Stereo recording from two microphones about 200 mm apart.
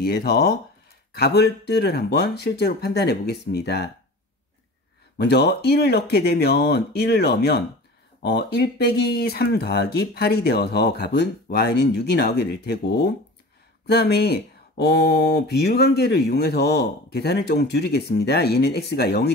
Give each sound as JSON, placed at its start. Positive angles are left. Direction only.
{"t": 0.0, "sound": "speech", "side_deg": 50}
{"t": 5.1, "sound": "speech", "side_deg": 55}